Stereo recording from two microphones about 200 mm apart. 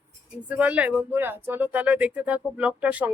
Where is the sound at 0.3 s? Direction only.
5° right (ahead or behind).